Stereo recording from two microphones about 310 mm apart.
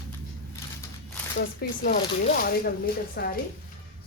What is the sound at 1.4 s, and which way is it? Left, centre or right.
Speech, left.